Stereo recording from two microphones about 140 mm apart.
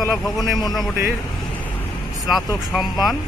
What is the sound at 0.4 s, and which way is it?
Speech, 30° left (ahead or behind).